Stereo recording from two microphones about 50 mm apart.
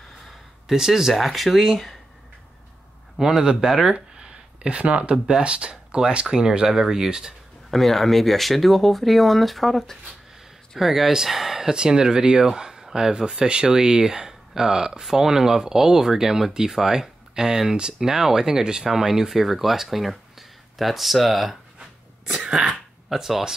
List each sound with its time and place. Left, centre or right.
0.7 s speech: centre
3.2 s speech: centre
3.8 s a sound: centre
5.4 s speech: right
7.7 s speech: centre
22.2 s cough: centre
23.0 s speech: centre